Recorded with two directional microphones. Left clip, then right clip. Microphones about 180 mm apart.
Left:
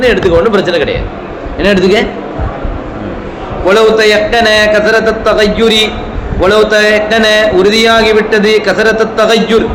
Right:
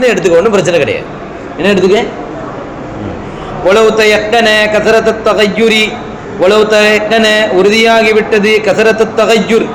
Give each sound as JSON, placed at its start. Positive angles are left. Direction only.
{"t": 0.0, "sound": "a man's voice", "side_deg": -30}
{"t": 1.5, "sound": "a man's voice", "side_deg": -5}
{"t": 3.7, "sound": "a man's voice", "side_deg": -20}